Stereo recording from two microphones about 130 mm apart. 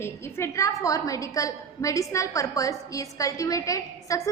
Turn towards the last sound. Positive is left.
turn(degrees=25)  # may be behind; listen again after turning